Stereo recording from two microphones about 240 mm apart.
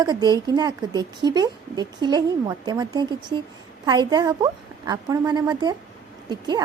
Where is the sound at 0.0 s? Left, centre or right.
Centre.